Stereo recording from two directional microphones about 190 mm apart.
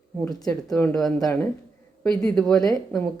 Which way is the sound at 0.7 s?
5° left (ahead or behind).